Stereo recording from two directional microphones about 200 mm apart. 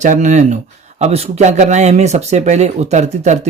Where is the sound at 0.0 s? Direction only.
35° right (ahead or behind).